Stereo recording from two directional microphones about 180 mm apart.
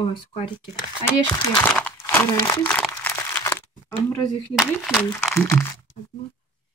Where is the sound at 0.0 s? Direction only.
30° left (ahead or behind).